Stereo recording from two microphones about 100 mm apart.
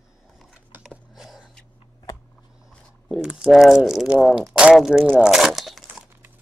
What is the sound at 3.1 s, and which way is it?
Speech, 5° right (ahead or behind).